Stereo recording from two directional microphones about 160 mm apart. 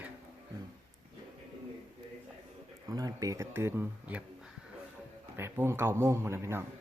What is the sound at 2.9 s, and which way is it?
Speech, 25° right (ahead or behind).